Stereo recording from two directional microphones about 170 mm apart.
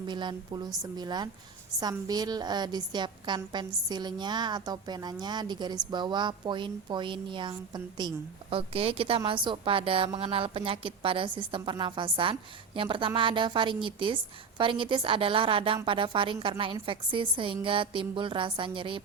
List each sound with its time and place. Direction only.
0.0 s a woman's voice: 25° right (ahead or behind)